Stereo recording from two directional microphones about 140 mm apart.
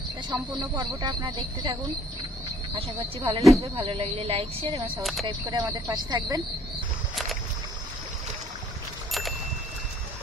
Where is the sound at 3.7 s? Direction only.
40° right (ahead or behind).